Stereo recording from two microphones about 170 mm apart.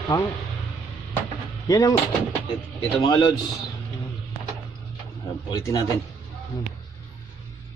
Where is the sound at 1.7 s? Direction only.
20° left (ahead or behind).